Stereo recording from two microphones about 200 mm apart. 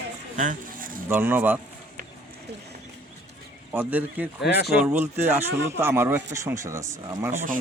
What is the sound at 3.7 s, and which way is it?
Speech, 10° right (ahead or behind).